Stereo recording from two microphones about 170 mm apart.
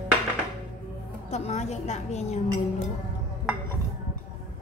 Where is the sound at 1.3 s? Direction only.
40° left (ahead or behind).